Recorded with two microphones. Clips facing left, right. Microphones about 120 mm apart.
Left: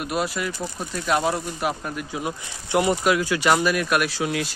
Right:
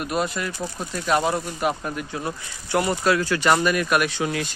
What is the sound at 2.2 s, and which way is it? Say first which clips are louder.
Speech: left 1 dB; 15° left (ahead or behind).